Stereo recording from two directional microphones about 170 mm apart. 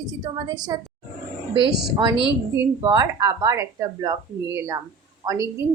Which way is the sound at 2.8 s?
20° right (ahead or behind).